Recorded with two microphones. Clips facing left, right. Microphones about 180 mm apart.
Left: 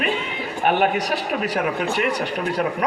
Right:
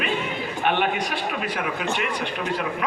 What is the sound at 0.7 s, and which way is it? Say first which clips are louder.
A man's voice: left 4 dB; 40° left (ahead or behind).